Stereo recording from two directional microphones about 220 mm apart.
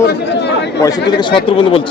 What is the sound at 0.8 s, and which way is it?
Speech, 20° left (ahead or behind).